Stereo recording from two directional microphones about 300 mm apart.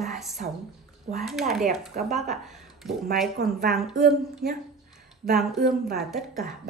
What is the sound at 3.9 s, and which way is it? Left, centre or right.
Speech, right.